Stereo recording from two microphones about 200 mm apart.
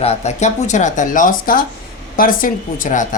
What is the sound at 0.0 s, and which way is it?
Speech, 30° left (ahead or behind).